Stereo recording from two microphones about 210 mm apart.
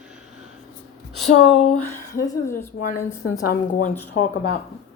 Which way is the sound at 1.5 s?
30° left (ahead or behind).